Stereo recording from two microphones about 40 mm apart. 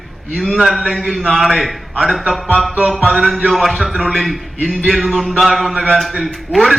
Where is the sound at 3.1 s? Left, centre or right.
Centre.